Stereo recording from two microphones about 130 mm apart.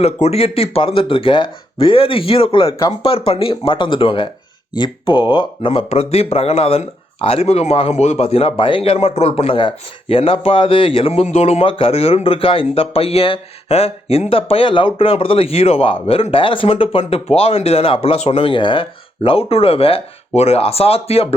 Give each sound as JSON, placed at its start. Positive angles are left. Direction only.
{"t": 0.0, "sound": "speech", "side_deg": 50}